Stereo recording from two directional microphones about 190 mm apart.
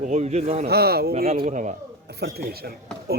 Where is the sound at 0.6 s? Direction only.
55° right (ahead or behind).